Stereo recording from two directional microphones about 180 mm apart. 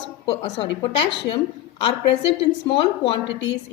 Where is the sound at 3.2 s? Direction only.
90° left.